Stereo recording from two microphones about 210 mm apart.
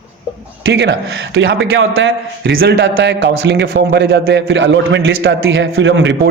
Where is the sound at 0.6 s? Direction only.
60° right (ahead or behind).